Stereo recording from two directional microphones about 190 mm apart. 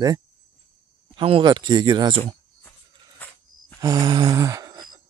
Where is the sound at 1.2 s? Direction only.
25° right (ahead or behind).